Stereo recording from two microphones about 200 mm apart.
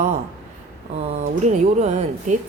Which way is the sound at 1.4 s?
35° right (ahead or behind).